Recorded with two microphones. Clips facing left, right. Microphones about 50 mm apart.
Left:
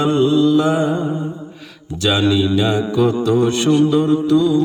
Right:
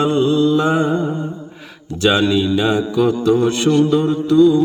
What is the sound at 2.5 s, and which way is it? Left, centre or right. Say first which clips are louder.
Mantra: right 1 dB; centre.